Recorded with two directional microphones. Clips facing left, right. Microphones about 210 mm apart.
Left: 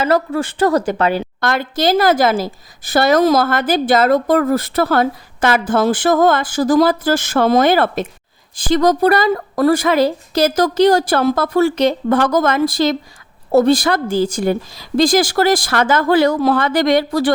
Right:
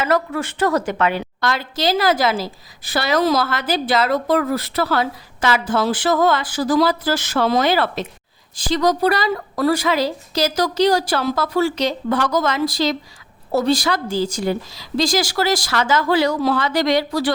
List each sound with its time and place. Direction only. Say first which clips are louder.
0.0 s speech: left 4 dB; 30° left (ahead or behind)
1.4 s a woman's voice: left 4 dB; 50° left (ahead or behind)